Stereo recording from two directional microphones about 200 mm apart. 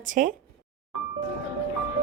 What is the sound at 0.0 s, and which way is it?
Speech, 40° right (ahead or behind).